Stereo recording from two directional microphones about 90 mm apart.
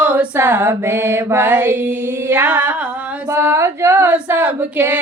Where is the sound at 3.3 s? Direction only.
30° right (ahead or behind).